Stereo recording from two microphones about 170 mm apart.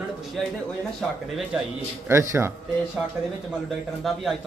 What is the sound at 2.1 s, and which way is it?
Speech, 15° right (ahead or behind).